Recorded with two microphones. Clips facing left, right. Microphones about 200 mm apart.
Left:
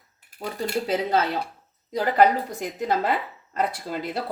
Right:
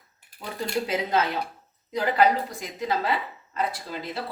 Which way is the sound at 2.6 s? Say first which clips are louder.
Left 3 dB; 50° left (ahead or behind).